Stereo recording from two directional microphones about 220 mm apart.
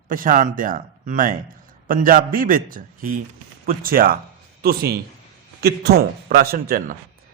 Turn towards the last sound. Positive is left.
turn(degrees=-40)  # may be behind; listen again after turning